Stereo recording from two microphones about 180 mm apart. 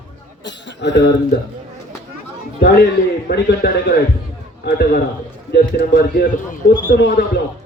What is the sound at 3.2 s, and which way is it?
A man's voice, 65° left (ahead or behind).